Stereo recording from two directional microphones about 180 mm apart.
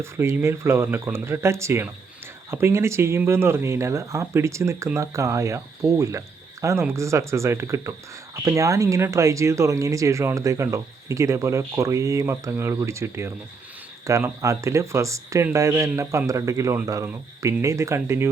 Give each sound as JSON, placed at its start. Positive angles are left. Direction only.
{"t": 0.0, "sound": "speech", "side_deg": -15}